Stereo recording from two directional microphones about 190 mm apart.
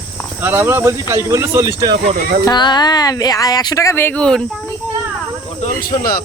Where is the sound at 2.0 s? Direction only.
45° right (ahead or behind).